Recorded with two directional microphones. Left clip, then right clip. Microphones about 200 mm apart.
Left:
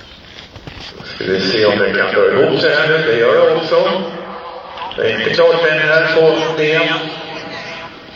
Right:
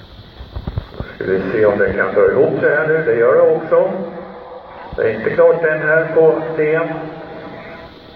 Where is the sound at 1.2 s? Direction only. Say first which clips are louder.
Left 1 dB; 50° left (ahead or behind).